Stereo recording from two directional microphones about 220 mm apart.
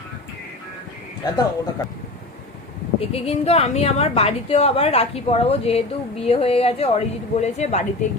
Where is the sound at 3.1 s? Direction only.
30° left (ahead or behind).